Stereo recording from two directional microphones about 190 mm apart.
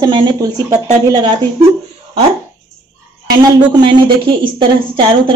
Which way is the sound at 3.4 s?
25° right (ahead or behind).